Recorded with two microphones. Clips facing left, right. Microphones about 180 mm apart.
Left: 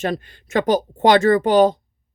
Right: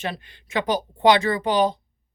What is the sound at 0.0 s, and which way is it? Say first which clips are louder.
Speech: left 7 dB; 45° left (ahead or behind).